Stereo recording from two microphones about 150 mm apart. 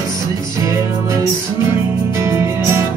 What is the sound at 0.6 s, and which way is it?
Music, 20° right (ahead or behind).